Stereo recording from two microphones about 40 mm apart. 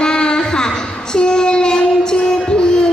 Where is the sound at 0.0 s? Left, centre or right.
Left.